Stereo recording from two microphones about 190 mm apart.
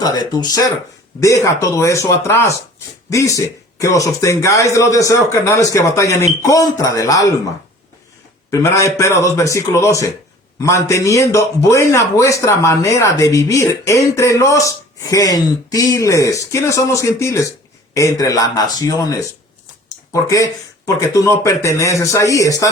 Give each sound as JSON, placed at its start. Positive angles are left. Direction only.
{"t": 0.0, "sound": "a man's voice", "side_deg": 20}
{"t": 8.4, "sound": "a man's voice", "side_deg": 15}